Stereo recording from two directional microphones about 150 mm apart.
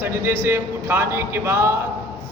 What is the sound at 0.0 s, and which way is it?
A man's voice, 15° right (ahead or behind).